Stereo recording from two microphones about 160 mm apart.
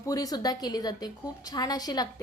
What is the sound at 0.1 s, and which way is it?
A woman's voice, 25° left (ahead or behind).